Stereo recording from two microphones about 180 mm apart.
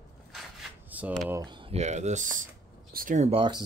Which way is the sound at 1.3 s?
25° right (ahead or behind).